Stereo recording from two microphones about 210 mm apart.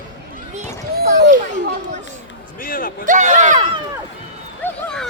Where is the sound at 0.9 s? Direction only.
50° right (ahead or behind).